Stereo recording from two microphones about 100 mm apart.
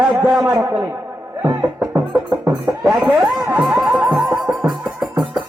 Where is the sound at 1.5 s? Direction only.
25° right (ahead or behind).